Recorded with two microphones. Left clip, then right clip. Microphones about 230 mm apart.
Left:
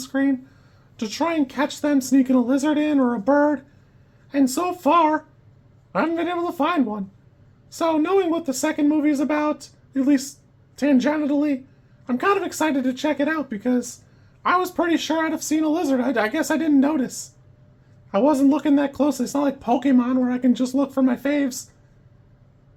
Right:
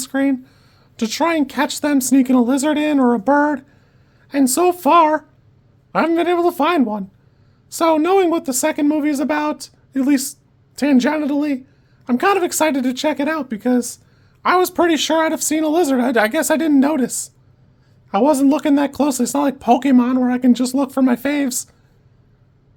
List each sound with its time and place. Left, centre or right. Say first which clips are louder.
0.0 s speech: right 3 dB; right